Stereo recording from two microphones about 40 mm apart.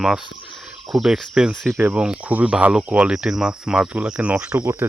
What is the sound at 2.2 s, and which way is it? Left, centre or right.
Speech, right.